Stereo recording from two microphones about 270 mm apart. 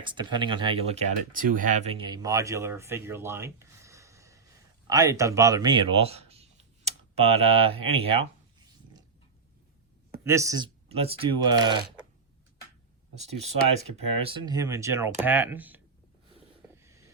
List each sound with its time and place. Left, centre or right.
0.0 s speech: centre
10.2 s speech: centre
13.1 s speech: right; by 15.8 s centre
16.7 s a sound: centre